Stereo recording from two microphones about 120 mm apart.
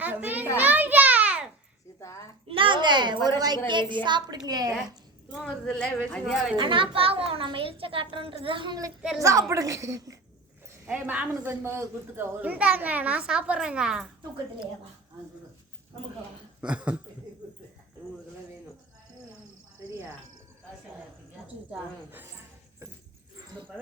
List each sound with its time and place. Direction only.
0.0 s children playing: 15° right (ahead or behind)
0.5 s a sound: 15° right (ahead or behind)
2.0 s a sound: 25° left (ahead or behind)
2.5 s a child's voice: 45° right (ahead or behind)
5.3 s speech: centre (ahead or behind)
6.6 s a woman's voice: 45° right (ahead or behind)
9.0 s speech: 5° right (ahead or behind)
9.2 s a woman's voice: 25° right (ahead or behind)
10.8 s speech: 10° right (ahead or behind)
16.6 s speech: 10° right (ahead or behind)
21.4 s a sound: 15° right (ahead or behind)